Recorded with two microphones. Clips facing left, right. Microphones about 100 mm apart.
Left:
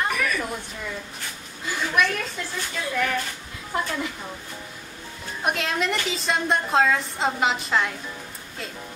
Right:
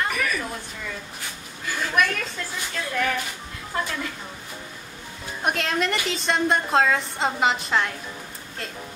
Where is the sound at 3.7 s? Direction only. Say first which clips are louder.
Left 1 dB; 20° left (ahead or behind).